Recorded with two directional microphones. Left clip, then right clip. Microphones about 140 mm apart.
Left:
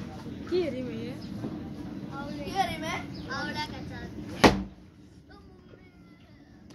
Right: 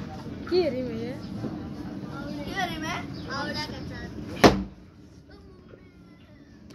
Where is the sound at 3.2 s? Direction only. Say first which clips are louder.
Right 2 dB; 5° right (ahead or behind).